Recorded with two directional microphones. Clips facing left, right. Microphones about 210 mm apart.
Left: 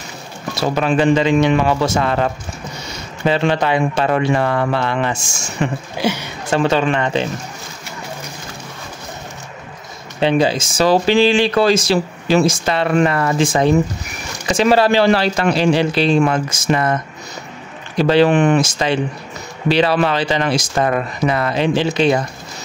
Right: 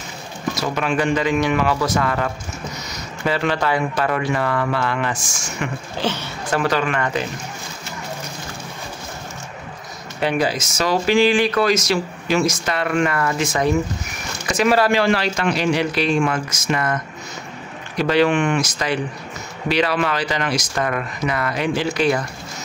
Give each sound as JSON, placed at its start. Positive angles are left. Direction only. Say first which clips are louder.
{"t": 0.6, "sound": "speech", "louder": "left 6 dB", "side_deg": 30}
{"t": 5.9, "sound": "speech", "louder": "left 3 dB", "side_deg": 10}
{"t": 6.5, "sound": "speech", "louder": "left 4 dB", "side_deg": 25}
{"t": 10.2, "sound": "speech", "louder": "left 5 dB", "side_deg": 25}